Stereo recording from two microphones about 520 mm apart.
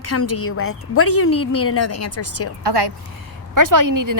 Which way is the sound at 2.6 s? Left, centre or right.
Right.